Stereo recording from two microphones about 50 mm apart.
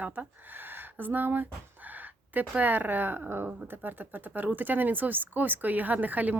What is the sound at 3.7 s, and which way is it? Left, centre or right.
Speech, right.